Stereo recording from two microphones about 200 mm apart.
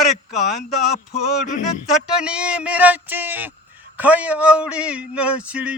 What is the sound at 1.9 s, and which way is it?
Speech, 5° right (ahead or behind).